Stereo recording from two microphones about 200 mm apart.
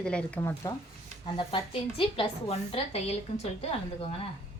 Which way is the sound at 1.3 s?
25° left (ahead or behind).